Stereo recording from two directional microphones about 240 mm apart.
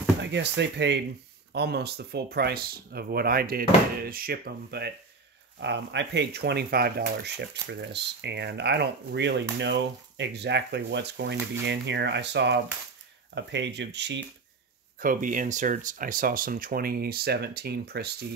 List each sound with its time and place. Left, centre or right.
0.2 s speech: right
15.0 s speech: right